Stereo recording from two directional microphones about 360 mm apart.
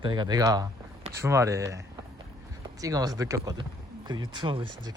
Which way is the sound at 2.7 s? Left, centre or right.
Centre.